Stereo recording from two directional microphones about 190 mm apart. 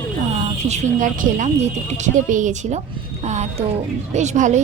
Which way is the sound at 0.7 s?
40° right (ahead or behind).